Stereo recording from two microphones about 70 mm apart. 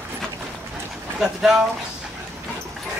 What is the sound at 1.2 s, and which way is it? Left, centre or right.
Speech, centre.